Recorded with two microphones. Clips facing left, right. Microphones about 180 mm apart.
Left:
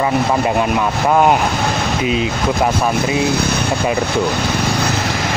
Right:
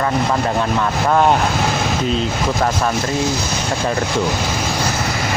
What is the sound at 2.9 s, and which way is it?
Speech, 60° left (ahead or behind).